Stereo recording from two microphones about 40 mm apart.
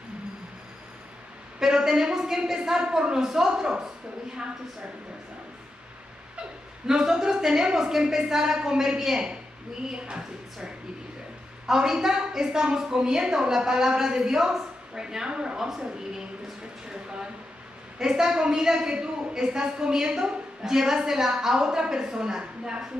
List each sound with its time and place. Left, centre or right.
1.6 s a woman's voice: centre
6.9 s a woman's voice: centre
9.8 s a woman's voice: right
11.6 s a woman's voice: centre
15.0 s a woman's voice: centre
16.9 s a woman's voice: right